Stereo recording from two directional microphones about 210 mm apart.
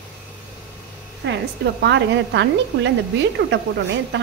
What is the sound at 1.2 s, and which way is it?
Speech, 60° right (ahead or behind).